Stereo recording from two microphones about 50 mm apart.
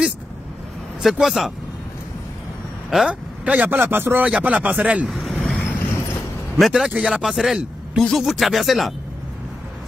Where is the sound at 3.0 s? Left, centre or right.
Right.